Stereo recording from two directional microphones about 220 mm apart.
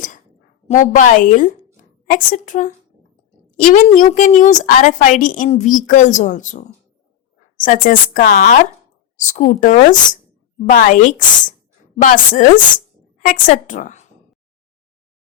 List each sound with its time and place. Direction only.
0.7 s a woman's voice: 35° left (ahead or behind)